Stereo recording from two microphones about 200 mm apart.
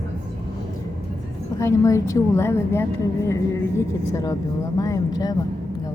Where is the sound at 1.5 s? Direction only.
15° left (ahead or behind).